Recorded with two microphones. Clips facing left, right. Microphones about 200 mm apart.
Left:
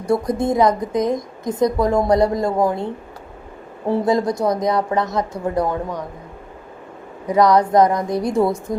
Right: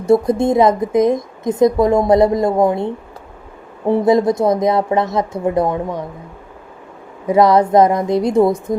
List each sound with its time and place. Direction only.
0.0 s a woman's voice: 25° right (ahead or behind)
7.3 s a woman's voice: 25° right (ahead or behind)